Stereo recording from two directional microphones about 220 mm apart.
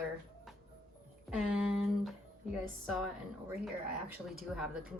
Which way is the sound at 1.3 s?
5° right (ahead or behind).